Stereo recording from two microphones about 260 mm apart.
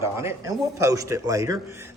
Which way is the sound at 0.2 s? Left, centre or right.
Centre.